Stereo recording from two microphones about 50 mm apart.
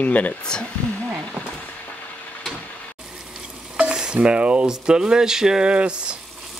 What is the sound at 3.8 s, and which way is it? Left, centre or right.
Speech, centre.